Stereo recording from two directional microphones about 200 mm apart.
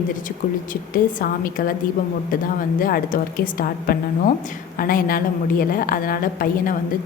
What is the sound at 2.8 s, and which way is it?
A woman's voice, 45° left (ahead or behind).